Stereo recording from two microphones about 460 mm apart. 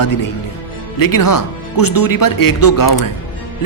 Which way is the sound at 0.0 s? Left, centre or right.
Left.